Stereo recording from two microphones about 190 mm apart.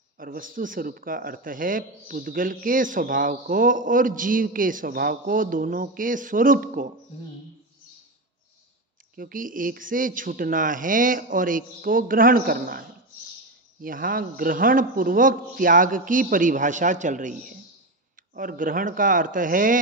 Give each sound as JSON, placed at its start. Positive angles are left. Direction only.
{"t": 0.2, "sound": "a man's voice", "side_deg": -45}
{"t": 9.1, "sound": "a man's voice", "side_deg": -45}